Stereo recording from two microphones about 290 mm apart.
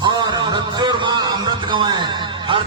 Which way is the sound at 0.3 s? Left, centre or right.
Centre.